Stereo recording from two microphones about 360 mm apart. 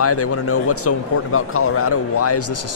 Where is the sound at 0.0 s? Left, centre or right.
Left.